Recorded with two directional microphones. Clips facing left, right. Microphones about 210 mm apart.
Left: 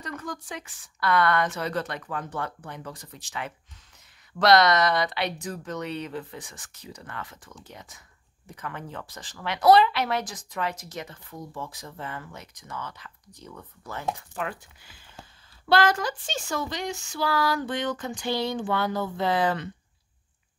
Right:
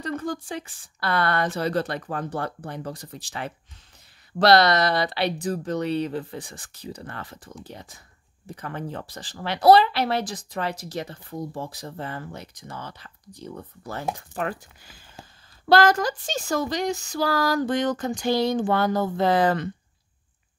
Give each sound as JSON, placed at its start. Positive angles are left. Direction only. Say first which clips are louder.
{"t": 0.0, "sound": "speech", "louder": "right 7 dB", "side_deg": -30}